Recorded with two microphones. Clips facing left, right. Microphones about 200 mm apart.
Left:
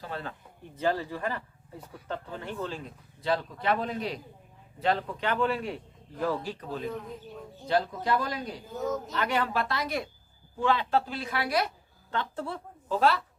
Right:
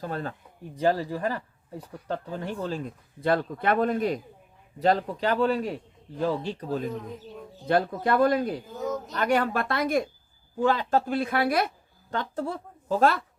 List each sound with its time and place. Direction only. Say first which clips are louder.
0.0 s a woman's voice: right 5 dB; 45° right (ahead or behind)
4.8 s a woman's voice: right 5 dB; 40° right (ahead or behind)
6.1 s speech: right 3 dB; 25° right (ahead or behind)
7.7 s speech: right 3 dB; 55° right (ahead or behind)
8.7 s speech: even; centre (ahead or behind)
9.1 s speech: right 7 dB; 45° right (ahead or behind)
12.1 s a woman's voice: right 3 dB; 40° right (ahead or behind)